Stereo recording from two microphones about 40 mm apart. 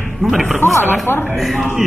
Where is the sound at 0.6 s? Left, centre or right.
Left.